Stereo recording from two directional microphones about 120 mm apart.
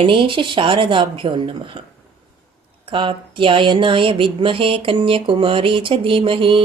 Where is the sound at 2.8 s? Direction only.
45° right (ahead or behind).